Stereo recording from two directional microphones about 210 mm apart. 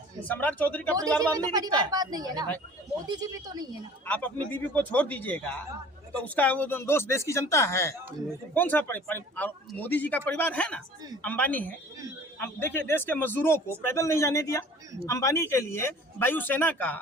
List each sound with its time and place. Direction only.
0.3 s a man's voice: 10° left (ahead or behind)
1.2 s a woman's voice: 20° right (ahead or behind)
4.0 s a man's voice: 10° left (ahead or behind)